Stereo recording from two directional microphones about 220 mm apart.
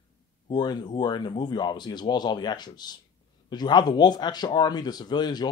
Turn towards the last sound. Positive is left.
turn(degrees=20)  # may be behind; listen again after turning